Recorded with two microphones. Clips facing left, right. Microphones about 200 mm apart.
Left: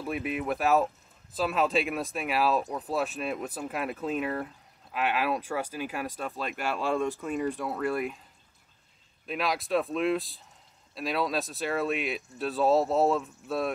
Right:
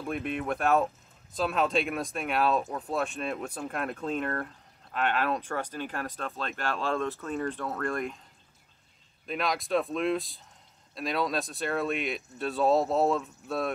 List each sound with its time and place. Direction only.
0.0 s speech: 5° left (ahead or behind)
9.2 s speech: centre (ahead or behind)